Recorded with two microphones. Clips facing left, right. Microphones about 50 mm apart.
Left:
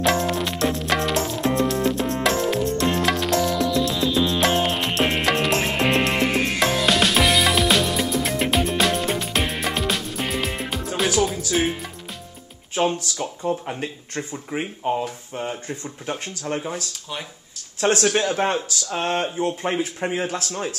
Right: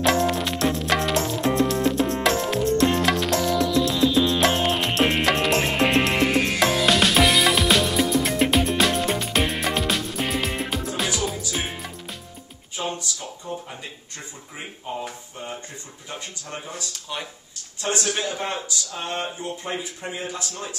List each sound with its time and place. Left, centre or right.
0.0 s music: centre
12.7 s music: left
13.2 s speech: left
17.7 s speech: left
18.2 s speech: left